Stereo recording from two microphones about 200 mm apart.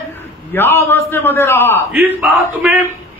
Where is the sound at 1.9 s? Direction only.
10° right (ahead or behind).